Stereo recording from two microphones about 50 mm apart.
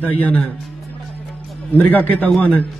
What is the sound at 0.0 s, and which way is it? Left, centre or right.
Speech, left.